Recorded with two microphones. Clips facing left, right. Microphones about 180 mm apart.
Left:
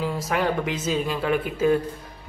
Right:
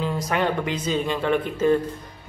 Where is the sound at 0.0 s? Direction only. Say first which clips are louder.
Right 1 dB; 5° left (ahead or behind).